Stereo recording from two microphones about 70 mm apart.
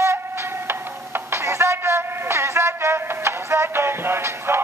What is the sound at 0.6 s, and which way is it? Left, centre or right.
Music, right.